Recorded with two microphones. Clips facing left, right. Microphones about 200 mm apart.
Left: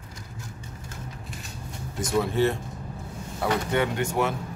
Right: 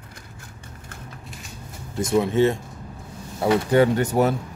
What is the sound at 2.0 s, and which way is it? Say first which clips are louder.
Speech: right 5 dB; 20° right (ahead or behind).